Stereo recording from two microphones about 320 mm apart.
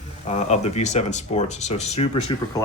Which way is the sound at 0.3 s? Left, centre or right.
Left.